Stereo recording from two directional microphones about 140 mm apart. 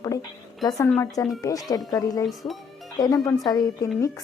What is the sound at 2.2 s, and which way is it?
Speech, centre (ahead or behind).